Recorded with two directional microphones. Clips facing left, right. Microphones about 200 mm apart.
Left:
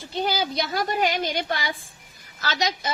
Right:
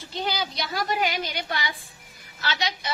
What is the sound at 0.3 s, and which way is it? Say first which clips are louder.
A woman's voice: left 3 dB; 50° left (ahead or behind).